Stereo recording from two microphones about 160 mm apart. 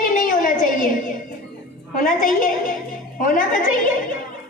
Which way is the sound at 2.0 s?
60° left (ahead or behind).